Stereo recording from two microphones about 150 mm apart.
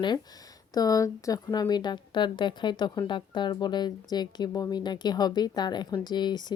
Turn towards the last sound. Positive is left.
turn(degrees=30)  # may be behind; listen again after turning